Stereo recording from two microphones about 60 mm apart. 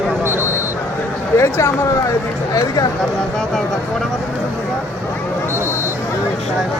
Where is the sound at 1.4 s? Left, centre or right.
Left.